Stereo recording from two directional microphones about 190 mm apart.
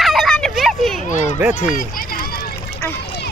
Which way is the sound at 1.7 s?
50° left (ahead or behind).